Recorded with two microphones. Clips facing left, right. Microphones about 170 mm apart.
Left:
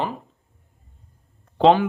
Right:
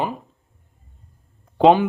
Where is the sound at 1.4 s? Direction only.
15° right (ahead or behind).